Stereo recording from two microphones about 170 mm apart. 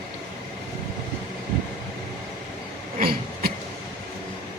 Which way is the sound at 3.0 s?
60° right (ahead or behind).